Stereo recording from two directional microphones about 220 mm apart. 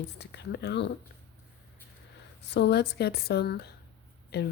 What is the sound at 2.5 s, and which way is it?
Speech, 50° left (ahead or behind).